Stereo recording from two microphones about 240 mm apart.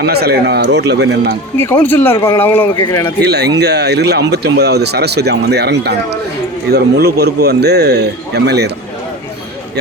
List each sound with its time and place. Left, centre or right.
0.0 s speech: right
1.5 s speech: centre
3.2 s speech: right